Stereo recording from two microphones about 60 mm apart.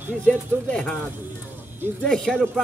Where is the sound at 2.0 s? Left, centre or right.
Centre.